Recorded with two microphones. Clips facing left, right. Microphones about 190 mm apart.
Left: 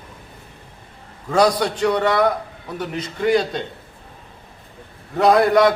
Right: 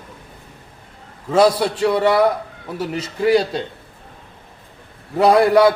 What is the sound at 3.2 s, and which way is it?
Speech, 5° right (ahead or behind).